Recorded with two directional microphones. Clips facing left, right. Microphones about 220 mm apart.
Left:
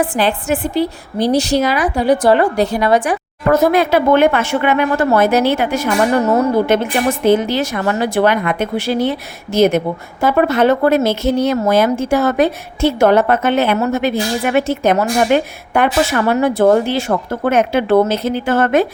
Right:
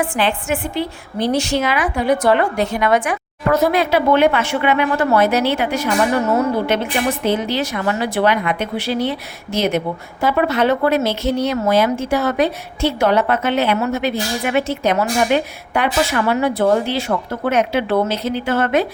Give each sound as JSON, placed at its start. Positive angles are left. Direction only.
{"t": 0.0, "sound": "a woman's voice", "side_deg": 40}
{"t": 3.5, "sound": "a woman's voice", "side_deg": 50}